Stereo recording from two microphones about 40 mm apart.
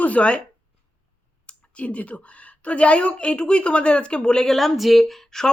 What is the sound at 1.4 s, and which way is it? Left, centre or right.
Speech, left.